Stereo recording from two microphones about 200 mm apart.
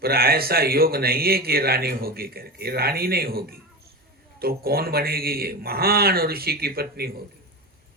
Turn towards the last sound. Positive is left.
turn(degrees=-50)  # may be behind; listen again after turning